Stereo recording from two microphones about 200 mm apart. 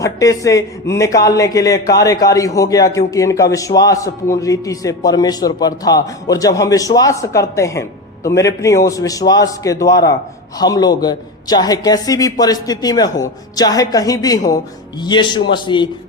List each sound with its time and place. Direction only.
0.0 s a man's voice: 15° left (ahead or behind)